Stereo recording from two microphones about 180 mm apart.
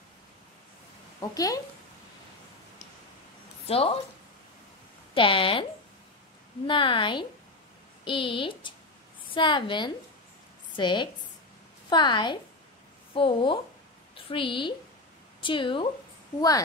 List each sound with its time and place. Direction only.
1.3 s speech: 20° left (ahead or behind)
3.6 s a woman's voice: 30° left (ahead or behind)
5.1 s speech: 30° left (ahead or behind)
6.7 s speech: 30° left (ahead or behind)